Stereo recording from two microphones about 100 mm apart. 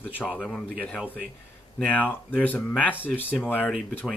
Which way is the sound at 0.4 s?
10° left (ahead or behind).